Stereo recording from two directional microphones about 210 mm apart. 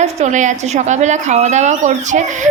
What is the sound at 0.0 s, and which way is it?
A woman's voice, 35° right (ahead or behind).